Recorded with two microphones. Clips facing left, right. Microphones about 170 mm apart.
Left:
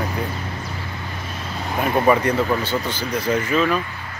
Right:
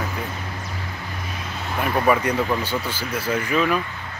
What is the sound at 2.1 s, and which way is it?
Speech, 10° right (ahead or behind).